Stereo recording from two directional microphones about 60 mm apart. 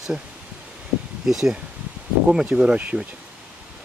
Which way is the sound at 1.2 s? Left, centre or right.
Centre.